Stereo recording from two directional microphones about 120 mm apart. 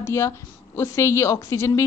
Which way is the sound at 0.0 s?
25° left (ahead or behind).